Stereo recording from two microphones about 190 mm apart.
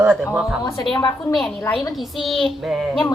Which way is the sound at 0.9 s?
25° left (ahead or behind).